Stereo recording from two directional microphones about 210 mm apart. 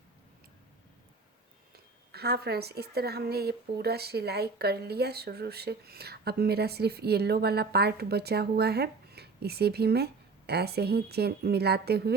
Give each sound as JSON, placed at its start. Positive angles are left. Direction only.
{"t": 1.7, "sound": "speech", "side_deg": -50}